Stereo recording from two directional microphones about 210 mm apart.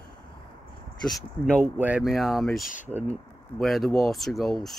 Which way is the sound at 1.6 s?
10° right (ahead or behind).